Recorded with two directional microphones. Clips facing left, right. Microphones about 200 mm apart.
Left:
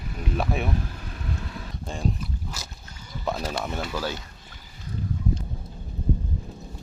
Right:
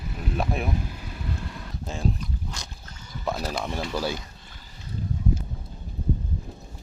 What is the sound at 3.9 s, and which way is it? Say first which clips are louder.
Speech: right 4 dB; 10° right (ahead or behind).